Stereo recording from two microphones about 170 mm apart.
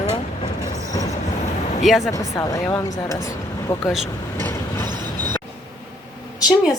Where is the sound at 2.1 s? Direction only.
20° left (ahead or behind).